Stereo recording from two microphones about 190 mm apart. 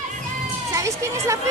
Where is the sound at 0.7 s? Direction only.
15° right (ahead or behind).